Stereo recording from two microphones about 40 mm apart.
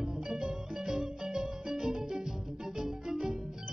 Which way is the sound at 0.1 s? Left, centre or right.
Centre.